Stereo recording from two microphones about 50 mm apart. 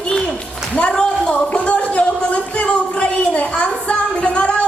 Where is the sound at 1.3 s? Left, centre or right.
Left.